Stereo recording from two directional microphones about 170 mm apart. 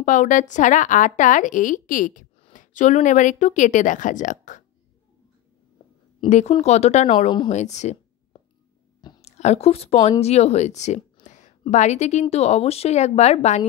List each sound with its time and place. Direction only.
0.0 s a woman's voice: 45° left (ahead or behind)
6.2 s a woman's voice: 45° left (ahead or behind)
9.2 s a woman's voice: 40° left (ahead or behind)